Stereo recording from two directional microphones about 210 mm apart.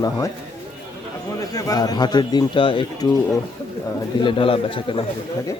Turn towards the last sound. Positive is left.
turn(degrees=25)  # may be behind; listen again after turning